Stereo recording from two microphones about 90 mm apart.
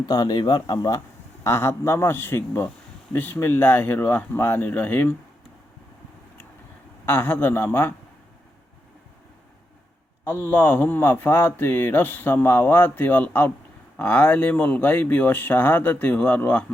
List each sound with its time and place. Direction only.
0.0 s speech: 50° left (ahead or behind)
1.5 s speech: 30° left (ahead or behind)
7.0 s speech: 25° left (ahead or behind)
10.2 s speech: 25° left (ahead or behind)